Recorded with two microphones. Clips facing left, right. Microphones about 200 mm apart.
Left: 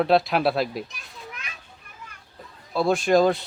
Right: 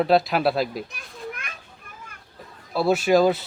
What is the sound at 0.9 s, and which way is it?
Children playing, 55° right (ahead or behind).